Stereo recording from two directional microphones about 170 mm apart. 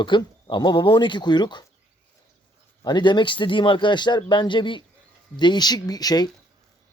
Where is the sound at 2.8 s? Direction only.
25° left (ahead or behind).